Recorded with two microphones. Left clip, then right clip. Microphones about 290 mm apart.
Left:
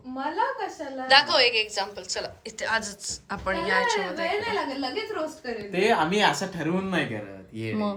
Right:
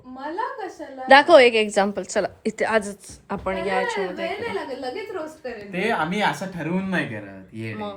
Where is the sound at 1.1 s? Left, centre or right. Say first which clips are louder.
Right 7 dB; centre.